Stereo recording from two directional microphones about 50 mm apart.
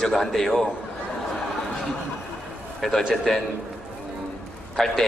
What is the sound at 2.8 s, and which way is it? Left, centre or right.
Speech, centre.